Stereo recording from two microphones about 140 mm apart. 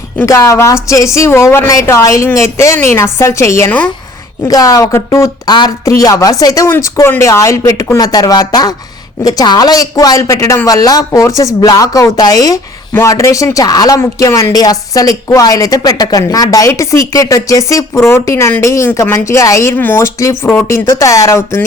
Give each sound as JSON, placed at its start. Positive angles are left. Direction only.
{"t": 0.2, "sound": "a woman's voice", "side_deg": 20}